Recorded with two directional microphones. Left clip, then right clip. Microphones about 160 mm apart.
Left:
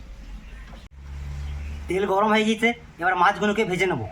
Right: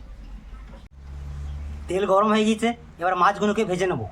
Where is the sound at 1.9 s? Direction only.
25° right (ahead or behind).